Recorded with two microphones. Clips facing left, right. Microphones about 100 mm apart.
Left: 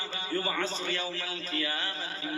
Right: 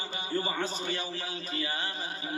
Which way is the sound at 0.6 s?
15° right (ahead or behind).